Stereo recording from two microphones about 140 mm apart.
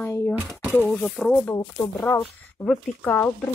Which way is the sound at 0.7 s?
10° left (ahead or behind).